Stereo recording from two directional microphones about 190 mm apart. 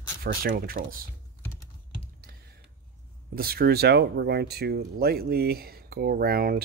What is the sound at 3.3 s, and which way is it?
Speech, 55° right (ahead or behind).